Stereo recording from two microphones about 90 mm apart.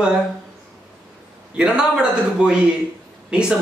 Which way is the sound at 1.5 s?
10° right (ahead or behind).